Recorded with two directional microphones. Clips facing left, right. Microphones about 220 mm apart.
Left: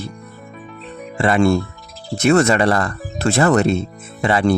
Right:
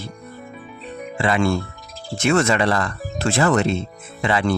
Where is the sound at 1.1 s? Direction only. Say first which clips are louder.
Left 5 dB; 45° left (ahead or behind).